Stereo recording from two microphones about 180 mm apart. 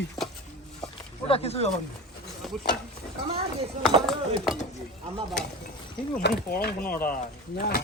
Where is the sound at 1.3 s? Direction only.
35° left (ahead or behind).